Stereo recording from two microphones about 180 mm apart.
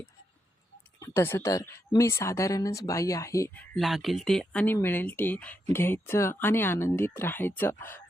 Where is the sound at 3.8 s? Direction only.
Centre (ahead or behind).